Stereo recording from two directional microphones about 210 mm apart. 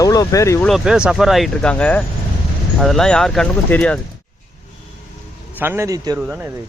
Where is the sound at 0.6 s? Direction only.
Centre (ahead or behind).